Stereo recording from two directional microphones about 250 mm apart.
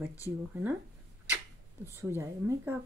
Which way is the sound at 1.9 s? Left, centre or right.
Centre.